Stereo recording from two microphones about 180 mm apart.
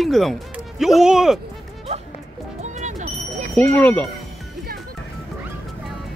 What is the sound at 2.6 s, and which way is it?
Music, 40° right (ahead or behind).